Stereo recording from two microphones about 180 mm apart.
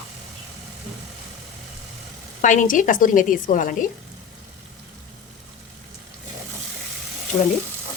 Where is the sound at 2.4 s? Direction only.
45° left (ahead or behind).